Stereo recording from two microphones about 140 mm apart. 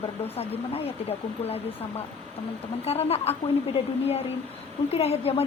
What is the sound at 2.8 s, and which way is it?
A woman's voice, 45° left (ahead or behind).